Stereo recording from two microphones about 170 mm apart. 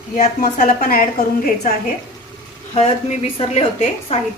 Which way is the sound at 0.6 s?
55° left (ahead or behind).